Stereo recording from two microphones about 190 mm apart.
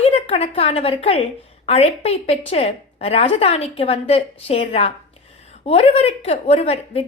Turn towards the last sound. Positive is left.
turn(degrees=30)  # may be behind; listen again after turning